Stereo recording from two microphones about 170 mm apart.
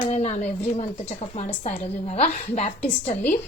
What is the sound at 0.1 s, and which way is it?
A woman's voice, 40° left (ahead or behind).